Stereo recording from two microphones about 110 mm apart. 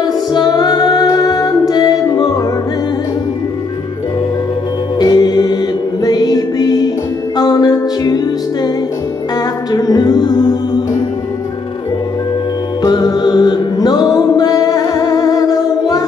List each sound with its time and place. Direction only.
0.0 s music: 40° left (ahead or behind)
4.9 s music: 35° left (ahead or behind)
9.7 s music: 35° left (ahead or behind)
12.8 s music: 35° left (ahead or behind)